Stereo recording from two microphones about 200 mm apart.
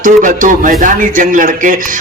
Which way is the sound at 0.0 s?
40° right (ahead or behind).